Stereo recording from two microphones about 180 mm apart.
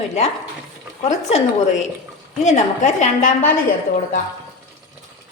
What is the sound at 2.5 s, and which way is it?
Speech, 40° left (ahead or behind).